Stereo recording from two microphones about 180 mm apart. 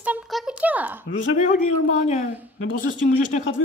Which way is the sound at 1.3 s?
40° left (ahead or behind).